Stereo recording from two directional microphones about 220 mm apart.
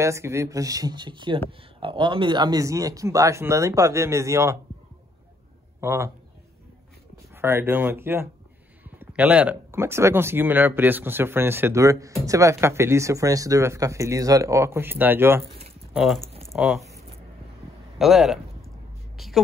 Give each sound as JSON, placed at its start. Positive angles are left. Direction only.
{"t": 0.0, "sound": "speech", "side_deg": -15}
{"t": 5.8, "sound": "a man's voice", "side_deg": -10}
{"t": 7.3, "sound": "speech", "side_deg": -10}
{"t": 17.9, "sound": "speech", "side_deg": 0}
{"t": 19.1, "sound": "a sound", "side_deg": 0}